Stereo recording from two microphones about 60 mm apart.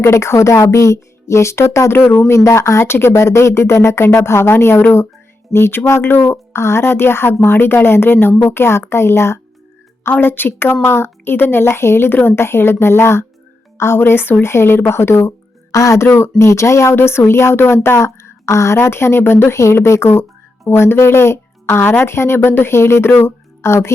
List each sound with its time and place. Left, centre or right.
0.0 s speech: left
2.0 s speech: left
10.1 s speech: left
15.7 s speech: left